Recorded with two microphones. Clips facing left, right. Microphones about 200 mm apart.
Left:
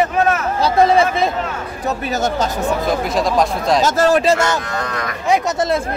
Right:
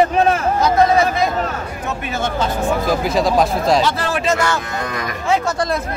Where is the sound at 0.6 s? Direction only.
30° left (ahead or behind).